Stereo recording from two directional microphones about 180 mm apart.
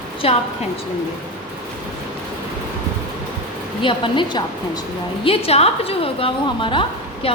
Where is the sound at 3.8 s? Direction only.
25° left (ahead or behind).